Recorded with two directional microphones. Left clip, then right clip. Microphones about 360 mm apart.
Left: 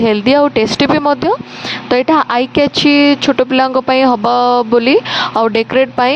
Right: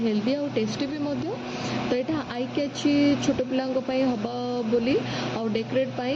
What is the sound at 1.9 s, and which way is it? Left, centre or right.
Speech, left.